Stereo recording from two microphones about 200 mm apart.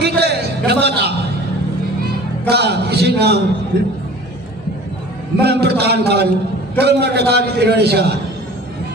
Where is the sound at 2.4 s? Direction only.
55° right (ahead or behind).